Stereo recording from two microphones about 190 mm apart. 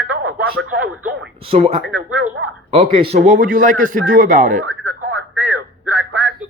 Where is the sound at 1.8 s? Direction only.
10° right (ahead or behind).